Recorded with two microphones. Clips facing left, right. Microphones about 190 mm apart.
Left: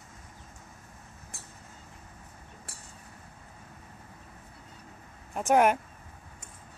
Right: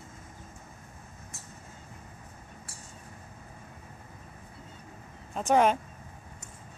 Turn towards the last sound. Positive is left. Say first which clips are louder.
# left 1 dB
turn(degrees=10)  # may be behind; listen again after turning